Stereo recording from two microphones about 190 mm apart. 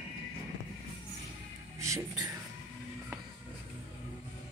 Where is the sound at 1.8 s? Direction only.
15° right (ahead or behind).